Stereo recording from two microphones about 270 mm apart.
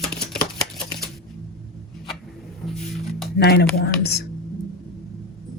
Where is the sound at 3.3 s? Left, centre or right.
Left.